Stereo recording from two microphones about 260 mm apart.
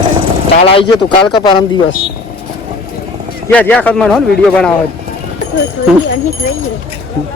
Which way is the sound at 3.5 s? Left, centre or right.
Centre.